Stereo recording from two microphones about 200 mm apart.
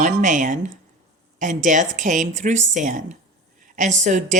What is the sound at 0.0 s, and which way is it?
Speech, 40° right (ahead or behind).